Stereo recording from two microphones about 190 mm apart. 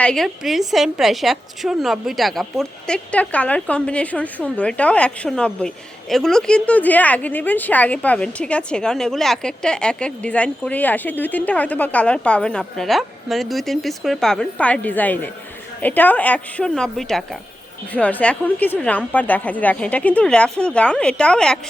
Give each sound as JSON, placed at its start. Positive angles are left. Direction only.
{"t": 0.0, "sound": "a woman's voice", "side_deg": 5}